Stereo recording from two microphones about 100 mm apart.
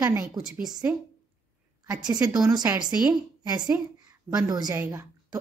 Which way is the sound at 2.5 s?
40° right (ahead or behind).